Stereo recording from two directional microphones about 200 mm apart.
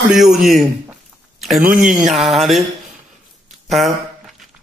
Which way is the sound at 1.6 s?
40° right (ahead or behind).